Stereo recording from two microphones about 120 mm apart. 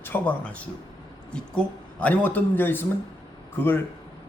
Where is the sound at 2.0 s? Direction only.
15° left (ahead or behind).